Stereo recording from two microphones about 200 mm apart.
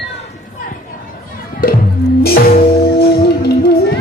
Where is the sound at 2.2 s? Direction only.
50° left (ahead or behind).